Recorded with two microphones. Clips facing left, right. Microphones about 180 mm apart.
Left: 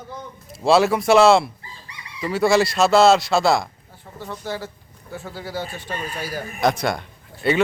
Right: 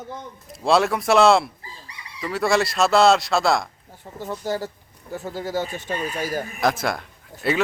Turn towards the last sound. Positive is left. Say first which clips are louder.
# left 3 dB
turn(degrees=0)  # may be behind; listen again after turning